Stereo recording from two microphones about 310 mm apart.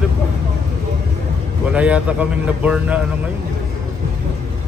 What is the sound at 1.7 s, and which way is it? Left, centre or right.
A man's voice, centre.